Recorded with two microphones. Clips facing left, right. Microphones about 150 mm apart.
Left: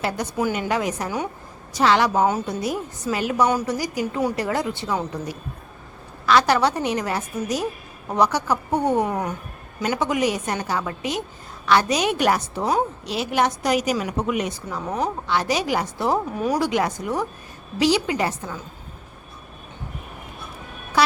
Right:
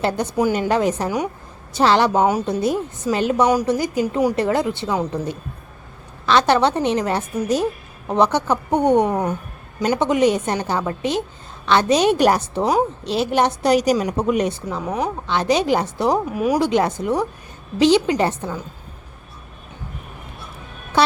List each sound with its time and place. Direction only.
0.5 s a woman's voice: 35° right (ahead or behind)
14.7 s a woman's voice: 10° right (ahead or behind)
15.3 s a woman's voice: 20° right (ahead or behind)
16.1 s a woman's voice: 5° right (ahead or behind)
16.6 s a woman's voice: 25° right (ahead or behind)